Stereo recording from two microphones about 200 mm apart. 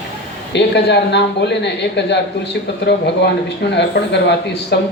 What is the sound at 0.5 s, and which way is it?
A man's voice, 60° left (ahead or behind).